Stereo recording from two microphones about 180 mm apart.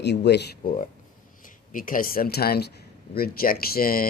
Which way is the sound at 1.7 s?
50° left (ahead or behind).